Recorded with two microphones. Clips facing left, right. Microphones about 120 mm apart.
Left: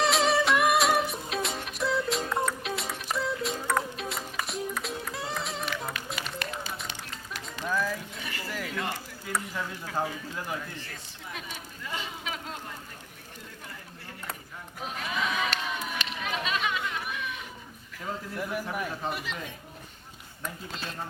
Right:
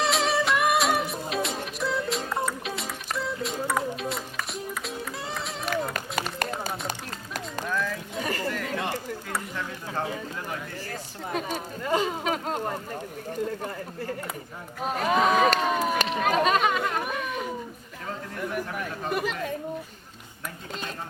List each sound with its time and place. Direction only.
0.0 s music: centre (ahead or behind)
6.1 s run: 40° right (ahead or behind)
7.7 s a sound: 5° left (ahead or behind)
8.2 s chatter: 45° right (ahead or behind)
9.2 s a sound: 5° left (ahead or behind)
11.3 s speech: 45° right (ahead or behind)
14.8 s a sound: 45° right (ahead or behind)
18.3 s a man's voice: 5° left (ahead or behind)
19.1 s speech: 50° right (ahead or behind)